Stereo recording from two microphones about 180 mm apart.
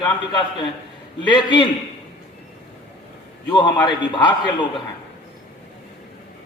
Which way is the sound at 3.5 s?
25° left (ahead or behind).